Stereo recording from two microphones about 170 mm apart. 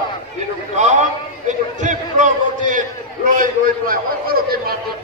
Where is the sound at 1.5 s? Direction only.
45° right (ahead or behind).